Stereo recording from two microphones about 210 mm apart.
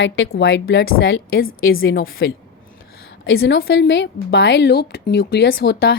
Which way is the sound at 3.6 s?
55° left (ahead or behind).